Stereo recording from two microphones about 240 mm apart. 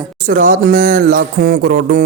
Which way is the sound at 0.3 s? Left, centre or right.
Right.